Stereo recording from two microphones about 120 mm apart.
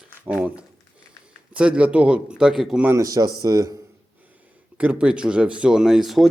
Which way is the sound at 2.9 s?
30° right (ahead or behind).